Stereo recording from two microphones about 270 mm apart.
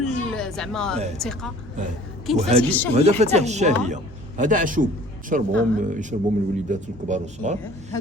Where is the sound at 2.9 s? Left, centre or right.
Right.